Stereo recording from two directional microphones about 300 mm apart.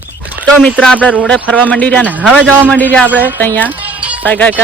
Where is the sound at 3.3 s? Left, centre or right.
Centre.